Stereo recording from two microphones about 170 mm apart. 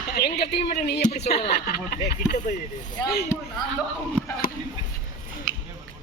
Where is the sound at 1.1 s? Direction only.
75° left (ahead or behind).